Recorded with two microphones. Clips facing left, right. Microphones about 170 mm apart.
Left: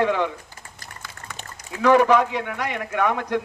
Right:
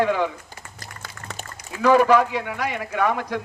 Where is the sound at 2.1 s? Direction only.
10° right (ahead or behind).